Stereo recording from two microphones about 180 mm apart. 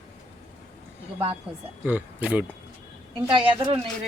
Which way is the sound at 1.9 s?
10° right (ahead or behind).